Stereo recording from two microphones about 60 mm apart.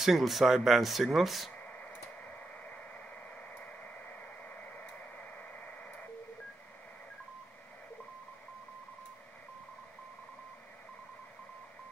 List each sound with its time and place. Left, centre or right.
0.0 s speech: centre